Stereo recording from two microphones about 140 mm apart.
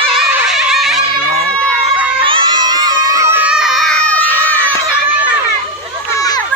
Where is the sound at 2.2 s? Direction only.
35° right (ahead or behind).